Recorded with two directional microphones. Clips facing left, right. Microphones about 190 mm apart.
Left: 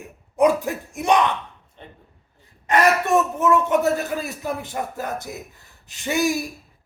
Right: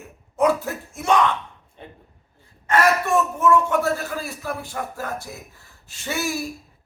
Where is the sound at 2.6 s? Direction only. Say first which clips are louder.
Left 1 dB; 15° left (ahead or behind).